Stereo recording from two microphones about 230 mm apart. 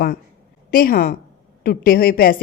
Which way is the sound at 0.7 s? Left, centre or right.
Left.